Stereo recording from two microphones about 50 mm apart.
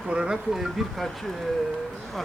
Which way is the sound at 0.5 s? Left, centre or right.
Centre.